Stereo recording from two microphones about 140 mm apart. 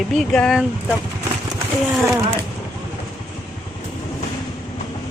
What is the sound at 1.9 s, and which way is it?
Speech, 5° right (ahead or behind).